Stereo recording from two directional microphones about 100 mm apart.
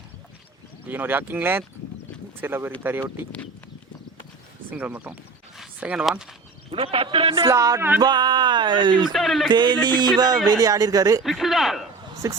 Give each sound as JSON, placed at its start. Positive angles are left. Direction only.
{"t": 0.9, "sound": "speech", "side_deg": -20}
{"t": 4.7, "sound": "speech", "side_deg": -15}
{"t": 6.7, "sound": "a man's voice", "side_deg": -65}
{"t": 7.4, "sound": "speech", "side_deg": -35}
{"t": 8.0, "sound": "speech", "side_deg": -45}
{"t": 9.0, "sound": "speech", "side_deg": 0}
{"t": 9.5, "sound": "speech", "side_deg": -50}
{"t": 11.2, "sound": "speech", "side_deg": 0}
{"t": 12.2, "sound": "speech", "side_deg": -30}